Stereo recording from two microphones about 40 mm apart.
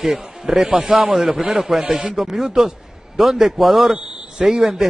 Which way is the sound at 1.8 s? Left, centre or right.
Right.